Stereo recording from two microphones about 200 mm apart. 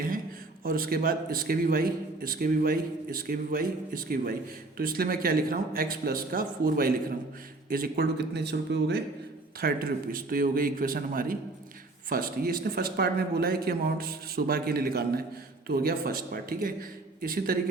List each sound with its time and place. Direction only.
0.6 s a man's voice: 45° right (ahead or behind)